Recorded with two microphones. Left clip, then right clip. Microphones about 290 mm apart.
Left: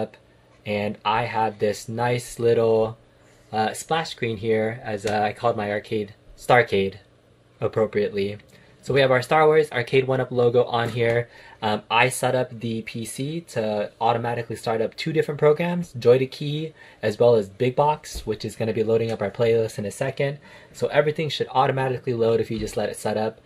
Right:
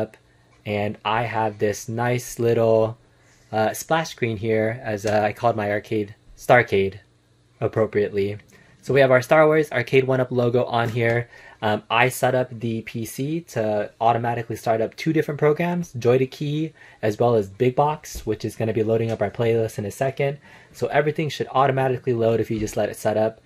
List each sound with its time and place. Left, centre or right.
0.7 s speech: right